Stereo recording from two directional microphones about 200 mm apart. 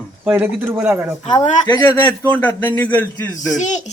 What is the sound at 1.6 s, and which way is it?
A man's voice, 15° left (ahead or behind).